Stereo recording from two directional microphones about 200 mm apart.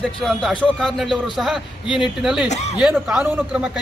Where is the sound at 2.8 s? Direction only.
5° right (ahead or behind).